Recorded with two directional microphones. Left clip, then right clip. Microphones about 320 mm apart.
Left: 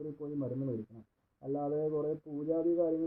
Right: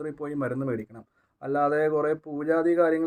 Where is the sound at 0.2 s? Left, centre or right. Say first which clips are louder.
Right 8 dB; right.